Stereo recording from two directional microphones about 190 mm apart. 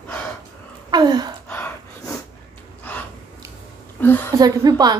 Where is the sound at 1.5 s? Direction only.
10° left (ahead or behind).